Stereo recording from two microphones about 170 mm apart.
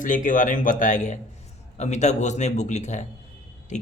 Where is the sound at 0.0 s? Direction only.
50° left (ahead or behind).